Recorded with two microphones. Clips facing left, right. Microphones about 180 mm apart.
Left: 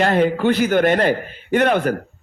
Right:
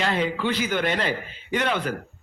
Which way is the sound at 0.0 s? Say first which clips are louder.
Left 8 dB; 50° left (ahead or behind).